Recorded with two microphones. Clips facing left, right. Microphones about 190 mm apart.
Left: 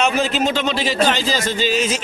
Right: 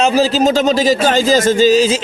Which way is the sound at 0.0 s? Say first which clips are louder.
Right 6 dB; 35° right (ahead or behind).